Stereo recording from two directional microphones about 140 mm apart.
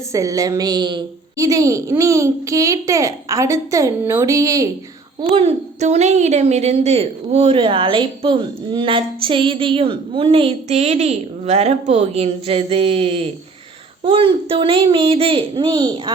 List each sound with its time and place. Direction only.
0.1 s a woman's voice: 25° right (ahead or behind)
5.3 s a woman's voice: 45° right (ahead or behind)